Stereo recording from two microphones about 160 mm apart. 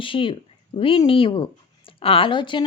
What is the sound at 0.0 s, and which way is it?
Speech, 30° left (ahead or behind).